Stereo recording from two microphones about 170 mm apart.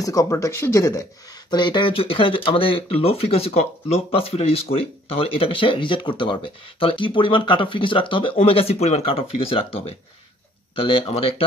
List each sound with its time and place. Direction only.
0.0 s speech: 20° left (ahead or behind)